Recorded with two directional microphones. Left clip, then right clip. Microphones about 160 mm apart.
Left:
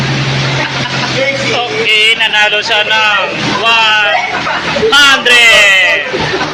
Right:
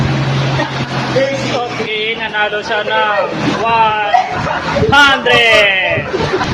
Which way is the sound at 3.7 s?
15° right (ahead or behind).